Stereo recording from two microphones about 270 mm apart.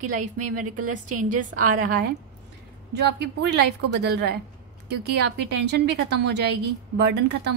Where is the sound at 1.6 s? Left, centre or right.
Right.